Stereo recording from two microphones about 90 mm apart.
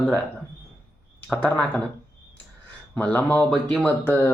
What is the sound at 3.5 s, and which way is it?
Speech, 5° left (ahead or behind).